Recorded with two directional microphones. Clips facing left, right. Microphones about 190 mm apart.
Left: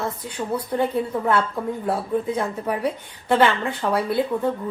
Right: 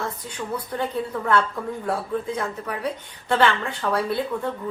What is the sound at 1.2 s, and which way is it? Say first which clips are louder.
A woman's voice: left 1 dB; 25° left (ahead or behind).